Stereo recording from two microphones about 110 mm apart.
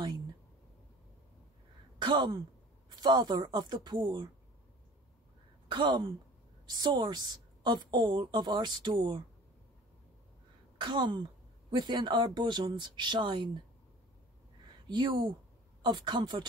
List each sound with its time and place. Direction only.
2.0 s a woman's voice: 45° right (ahead or behind)
5.7 s a woman's voice: 45° right (ahead or behind)
10.8 s speech: 45° right (ahead or behind)
14.9 s a woman's voice: 40° right (ahead or behind)